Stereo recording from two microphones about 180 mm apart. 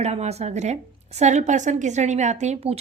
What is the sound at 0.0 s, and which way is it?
A woman's voice, 35° right (ahead or behind).